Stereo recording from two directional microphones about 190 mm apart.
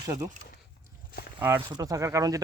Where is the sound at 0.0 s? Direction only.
15° right (ahead or behind).